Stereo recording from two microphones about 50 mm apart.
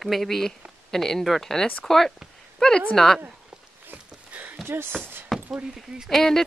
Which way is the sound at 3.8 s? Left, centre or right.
Right.